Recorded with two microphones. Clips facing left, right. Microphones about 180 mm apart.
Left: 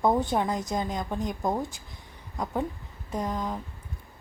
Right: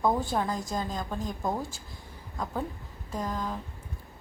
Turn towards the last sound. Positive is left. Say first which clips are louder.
# left 2 dB
turn(degrees=20)  # may be behind; listen again after turning